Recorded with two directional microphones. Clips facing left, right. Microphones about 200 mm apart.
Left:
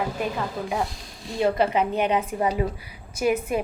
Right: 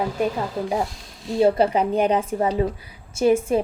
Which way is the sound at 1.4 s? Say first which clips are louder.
Right 4 dB; 35° right (ahead or behind).